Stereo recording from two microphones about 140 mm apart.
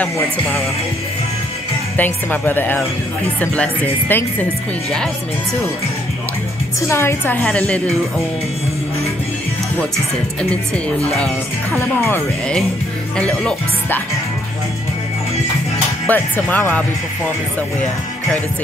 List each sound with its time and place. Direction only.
2.0 s speech: 10° left (ahead or behind)
6.9 s speech: 20° left (ahead or behind)
11.7 s speech: 15° left (ahead or behind)
13.3 s speech: 5° left (ahead or behind)
16.1 s speech: 10° left (ahead or behind)